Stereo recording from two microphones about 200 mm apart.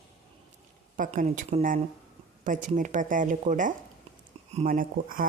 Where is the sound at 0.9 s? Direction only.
40° right (ahead or behind).